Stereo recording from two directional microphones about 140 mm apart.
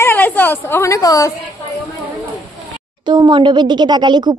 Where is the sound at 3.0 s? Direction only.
35° right (ahead or behind).